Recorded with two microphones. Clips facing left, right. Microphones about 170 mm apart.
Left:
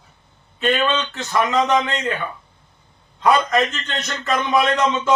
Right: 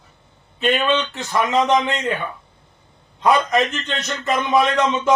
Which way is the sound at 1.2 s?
20° right (ahead or behind).